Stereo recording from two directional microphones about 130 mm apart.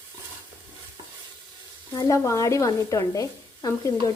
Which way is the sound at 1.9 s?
25° left (ahead or behind).